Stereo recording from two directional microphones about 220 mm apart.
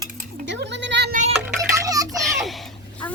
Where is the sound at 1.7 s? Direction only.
15° right (ahead or behind).